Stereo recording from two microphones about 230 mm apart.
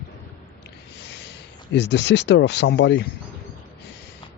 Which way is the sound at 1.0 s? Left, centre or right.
Left.